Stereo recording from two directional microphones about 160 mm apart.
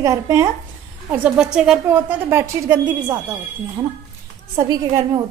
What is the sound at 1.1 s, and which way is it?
A woman's voice, 5° right (ahead or behind).